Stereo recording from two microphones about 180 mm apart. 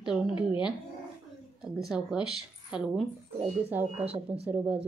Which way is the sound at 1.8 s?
5° right (ahead or behind).